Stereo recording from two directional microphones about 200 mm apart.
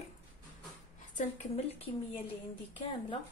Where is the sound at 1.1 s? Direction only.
30° left (ahead or behind).